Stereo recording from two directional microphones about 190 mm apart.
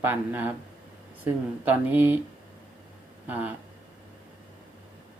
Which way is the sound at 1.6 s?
10° right (ahead or behind).